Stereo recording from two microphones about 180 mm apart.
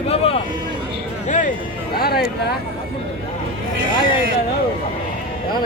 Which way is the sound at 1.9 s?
60° left (ahead or behind).